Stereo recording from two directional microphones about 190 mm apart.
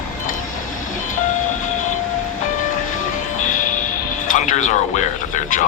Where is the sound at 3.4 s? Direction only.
45° left (ahead or behind).